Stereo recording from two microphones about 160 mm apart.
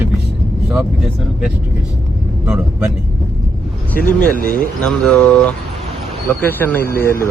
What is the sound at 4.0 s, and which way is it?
Speech, 55° left (ahead or behind).